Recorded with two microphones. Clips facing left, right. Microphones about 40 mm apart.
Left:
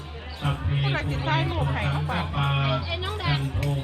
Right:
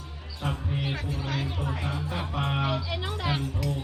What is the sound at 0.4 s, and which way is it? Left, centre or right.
Speech, left.